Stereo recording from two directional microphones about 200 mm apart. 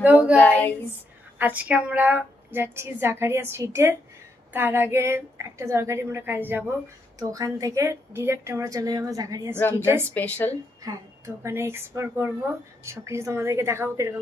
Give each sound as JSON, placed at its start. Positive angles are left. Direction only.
{"t": 0.0, "sound": "a woman's voice", "side_deg": -5}
{"t": 0.4, "sound": "speech", "side_deg": 10}
{"t": 1.4, "sound": "a woman's voice", "side_deg": -5}
{"t": 10.1, "sound": "speech", "side_deg": 10}
{"t": 10.8, "sound": "a woman's voice", "side_deg": -15}